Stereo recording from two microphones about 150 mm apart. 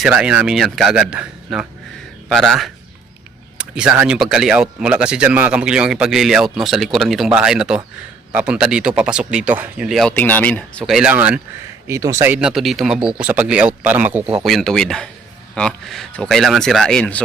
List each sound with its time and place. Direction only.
0.1 s speech: 10° right (ahead or behind); by 10.8 s 10° left (ahead or behind)
10.8 s speech: 5° right (ahead or behind)
11.9 s speech: 20° right (ahead or behind); by 17.2 s 5° left (ahead or behind)